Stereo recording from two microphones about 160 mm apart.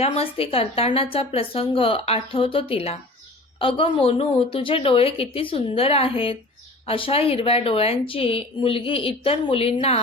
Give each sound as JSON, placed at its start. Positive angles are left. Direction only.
{"t": 0.0, "sound": "speech", "side_deg": 35}